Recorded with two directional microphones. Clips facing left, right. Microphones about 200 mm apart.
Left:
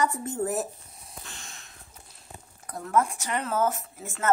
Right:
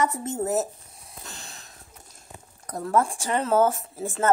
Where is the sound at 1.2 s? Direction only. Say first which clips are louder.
Right 3 dB; 35° right (ahead or behind).